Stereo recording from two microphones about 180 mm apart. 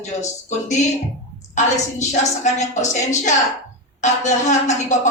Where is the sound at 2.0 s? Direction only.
40° left (ahead or behind).